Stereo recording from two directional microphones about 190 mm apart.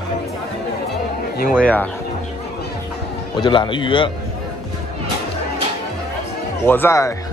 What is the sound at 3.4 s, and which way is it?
Speech, 25° left (ahead or behind).